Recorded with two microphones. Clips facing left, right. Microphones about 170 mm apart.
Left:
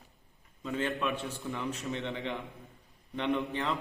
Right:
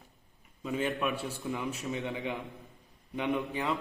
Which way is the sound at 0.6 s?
15° right (ahead or behind).